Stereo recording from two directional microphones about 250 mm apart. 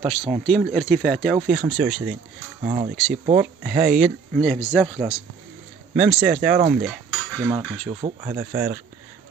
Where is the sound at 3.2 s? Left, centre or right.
Right.